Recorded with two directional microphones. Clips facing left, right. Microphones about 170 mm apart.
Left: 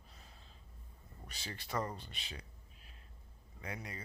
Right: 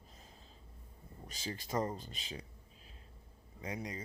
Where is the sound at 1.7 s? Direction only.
25° right (ahead or behind).